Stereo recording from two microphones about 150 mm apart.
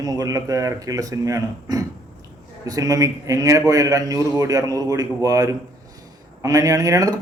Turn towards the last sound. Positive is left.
turn(degrees=-25)  # may be behind; listen again after turning